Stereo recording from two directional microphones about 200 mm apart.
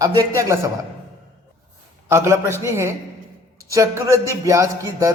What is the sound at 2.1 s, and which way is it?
A man's voice, 15° right (ahead or behind).